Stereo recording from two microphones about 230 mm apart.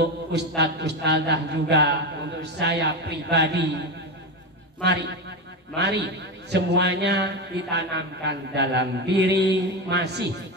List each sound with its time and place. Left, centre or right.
0.3 s mantra: right
5.8 s mantra: right